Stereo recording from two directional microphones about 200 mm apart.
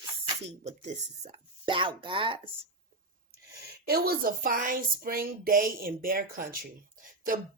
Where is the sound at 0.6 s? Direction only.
35° right (ahead or behind).